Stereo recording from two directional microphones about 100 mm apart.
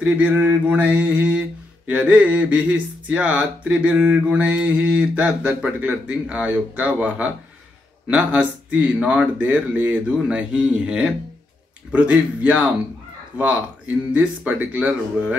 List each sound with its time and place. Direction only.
0.0 s speech: 15° right (ahead or behind)